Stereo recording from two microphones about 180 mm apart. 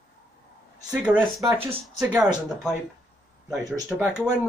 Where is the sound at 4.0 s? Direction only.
5° right (ahead or behind).